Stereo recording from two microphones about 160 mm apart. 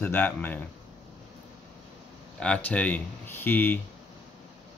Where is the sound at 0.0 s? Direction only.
10° left (ahead or behind).